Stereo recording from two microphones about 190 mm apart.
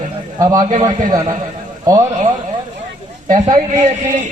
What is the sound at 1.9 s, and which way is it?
Speech, 20° right (ahead or behind).